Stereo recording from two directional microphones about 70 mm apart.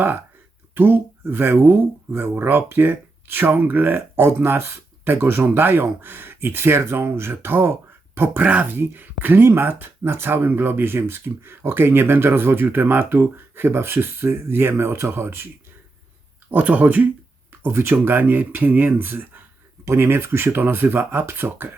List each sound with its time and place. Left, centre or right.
0.7 s speech: right
16.5 s speech: right
17.6 s speech: right
19.8 s speech: right